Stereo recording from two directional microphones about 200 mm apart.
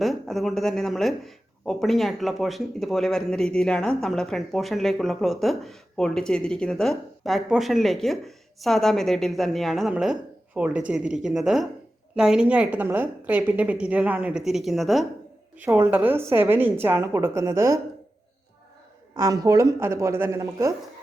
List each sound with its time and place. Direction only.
0.0 s a woman's voice: centre (ahead or behind)
19.1 s a woman's voice: 15° right (ahead or behind)